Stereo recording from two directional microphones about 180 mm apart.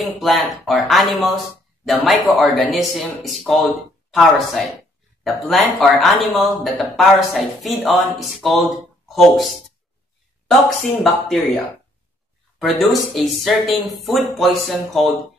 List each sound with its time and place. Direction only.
0.0 s speech: centre (ahead or behind)
11.2 s speech: centre (ahead or behind)